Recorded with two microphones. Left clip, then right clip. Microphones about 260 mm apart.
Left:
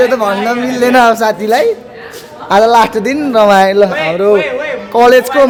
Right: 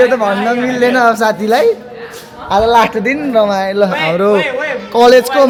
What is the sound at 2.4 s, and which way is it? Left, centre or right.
Speech, left.